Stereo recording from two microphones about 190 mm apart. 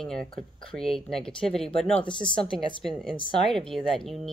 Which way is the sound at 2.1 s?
25° left (ahead or behind).